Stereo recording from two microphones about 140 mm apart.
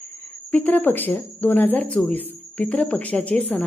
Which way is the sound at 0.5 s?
10° left (ahead or behind).